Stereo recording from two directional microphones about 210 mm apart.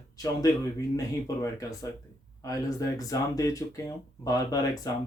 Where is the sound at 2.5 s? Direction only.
15° left (ahead or behind).